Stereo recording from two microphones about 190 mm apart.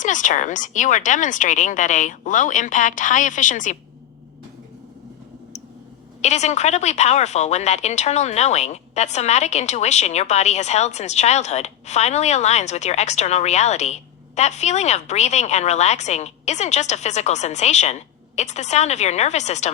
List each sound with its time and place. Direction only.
0.0 s a woman's voice: 40° left (ahead or behind)
6.2 s a woman's voice: 35° left (ahead or behind)